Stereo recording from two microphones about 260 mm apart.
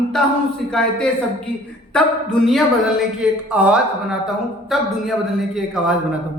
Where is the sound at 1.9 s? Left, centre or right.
Centre.